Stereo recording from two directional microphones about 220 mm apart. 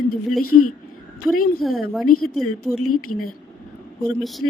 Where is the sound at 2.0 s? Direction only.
85° left.